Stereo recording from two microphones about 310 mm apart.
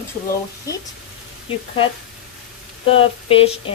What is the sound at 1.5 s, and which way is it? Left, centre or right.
Speech, centre.